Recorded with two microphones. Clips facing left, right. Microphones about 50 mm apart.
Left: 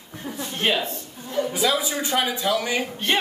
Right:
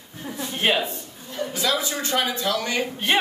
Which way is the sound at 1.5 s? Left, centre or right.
Centre.